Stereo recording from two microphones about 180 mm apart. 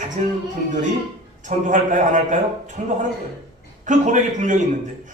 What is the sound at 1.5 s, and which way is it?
A man's voice, 45° right (ahead or behind).